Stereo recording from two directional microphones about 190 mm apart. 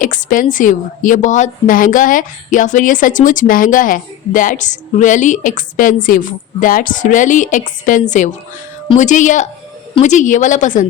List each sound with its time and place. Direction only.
0.0 s a woman's voice: 45° left (ahead or behind)